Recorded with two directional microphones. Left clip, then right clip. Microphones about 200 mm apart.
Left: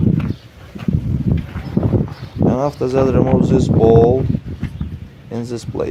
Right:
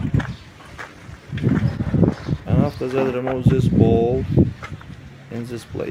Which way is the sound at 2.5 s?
20° left (ahead or behind).